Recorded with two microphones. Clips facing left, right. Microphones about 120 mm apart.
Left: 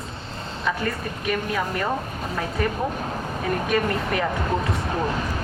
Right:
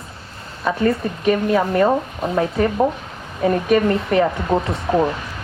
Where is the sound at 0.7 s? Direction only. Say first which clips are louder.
Right 8 dB; 40° right (ahead or behind).